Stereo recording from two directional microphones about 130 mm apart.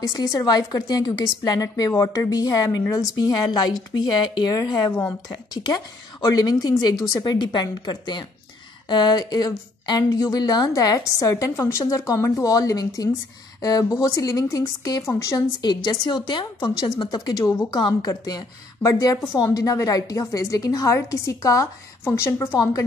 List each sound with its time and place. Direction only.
0.1 s a woman's voice: 25° left (ahead or behind)